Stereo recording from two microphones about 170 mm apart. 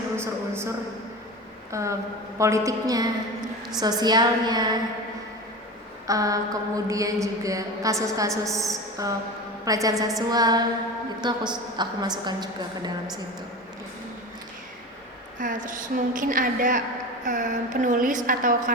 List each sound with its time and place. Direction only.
0.2 s a man's voice: 15° right (ahead or behind)
1.7 s a man's voice: 15° right (ahead or behind)
2.4 s mantra: 20° right (ahead or behind)
6.1 s mantra: 20° right (ahead or behind)
8.3 s a woman's voice: centre (ahead or behind)
8.6 s a woman's voice: 20° right (ahead or behind)
9.6 s mantra: 20° right (ahead or behind)
15.4 s speech: 50° right (ahead or behind)